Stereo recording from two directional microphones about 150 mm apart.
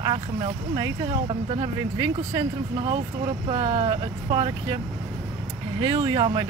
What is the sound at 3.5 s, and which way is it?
Speech, 35° right (ahead or behind).